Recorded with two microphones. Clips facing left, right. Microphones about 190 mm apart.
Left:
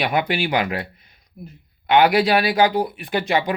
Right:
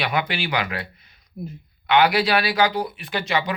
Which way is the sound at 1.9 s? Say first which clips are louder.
Left 3 dB; 50° left (ahead or behind).